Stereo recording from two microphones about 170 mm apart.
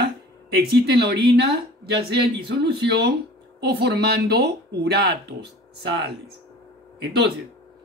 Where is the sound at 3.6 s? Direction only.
75° right (ahead or behind).